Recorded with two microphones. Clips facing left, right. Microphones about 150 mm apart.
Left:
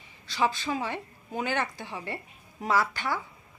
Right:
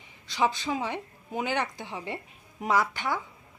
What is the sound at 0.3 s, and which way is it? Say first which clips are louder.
Speech: right 1 dB; 20° right (ahead or behind).